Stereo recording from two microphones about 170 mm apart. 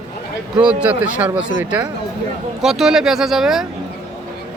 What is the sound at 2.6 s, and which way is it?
Speech, centre (ahead or behind).